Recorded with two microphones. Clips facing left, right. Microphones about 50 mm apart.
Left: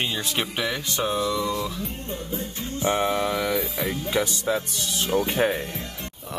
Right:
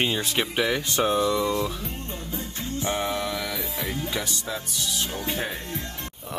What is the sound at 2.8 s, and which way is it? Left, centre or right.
Speech, left.